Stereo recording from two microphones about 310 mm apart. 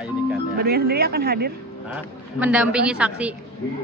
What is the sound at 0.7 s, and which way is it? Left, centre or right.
Speech, right.